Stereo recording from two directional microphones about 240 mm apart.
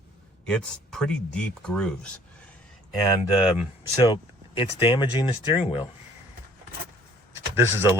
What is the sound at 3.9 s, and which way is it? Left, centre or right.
Speech, centre.